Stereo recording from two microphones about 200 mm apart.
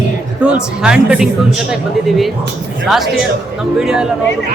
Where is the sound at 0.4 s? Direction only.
5° right (ahead or behind).